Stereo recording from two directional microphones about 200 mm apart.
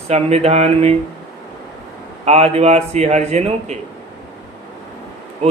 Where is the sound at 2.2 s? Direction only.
30° right (ahead or behind).